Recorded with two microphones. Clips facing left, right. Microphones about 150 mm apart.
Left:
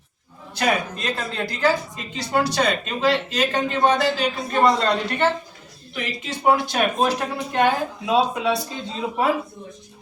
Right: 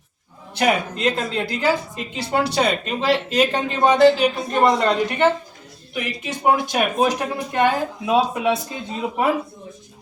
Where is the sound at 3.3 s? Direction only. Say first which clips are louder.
Right 2 dB; 10° right (ahead or behind).